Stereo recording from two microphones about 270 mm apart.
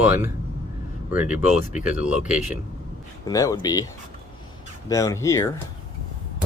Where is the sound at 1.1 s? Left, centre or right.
Centre.